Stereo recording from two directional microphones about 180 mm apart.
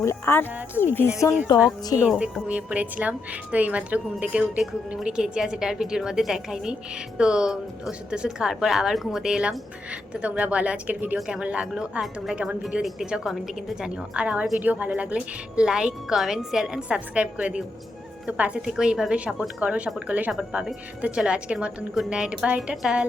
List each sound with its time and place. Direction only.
0.0 s speech: 15° left (ahead or behind)
2.0 s a woman's voice: 5° right (ahead or behind)